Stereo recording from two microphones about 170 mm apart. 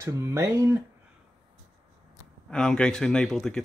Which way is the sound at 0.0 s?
15° right (ahead or behind).